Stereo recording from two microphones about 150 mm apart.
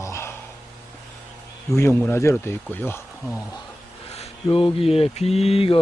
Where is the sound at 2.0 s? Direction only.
15° left (ahead or behind).